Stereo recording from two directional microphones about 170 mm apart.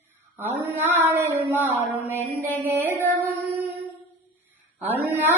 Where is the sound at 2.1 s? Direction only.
10° left (ahead or behind).